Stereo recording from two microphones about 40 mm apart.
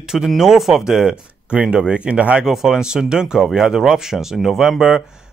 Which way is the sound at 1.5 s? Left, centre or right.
Right.